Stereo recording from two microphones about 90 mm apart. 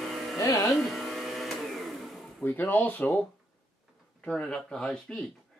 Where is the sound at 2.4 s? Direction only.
20° left (ahead or behind).